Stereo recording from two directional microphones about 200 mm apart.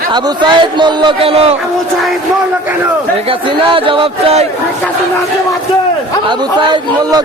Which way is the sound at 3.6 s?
25° right (ahead or behind).